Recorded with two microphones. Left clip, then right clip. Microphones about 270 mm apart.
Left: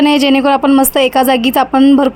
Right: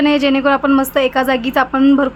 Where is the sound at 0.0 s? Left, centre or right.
Left.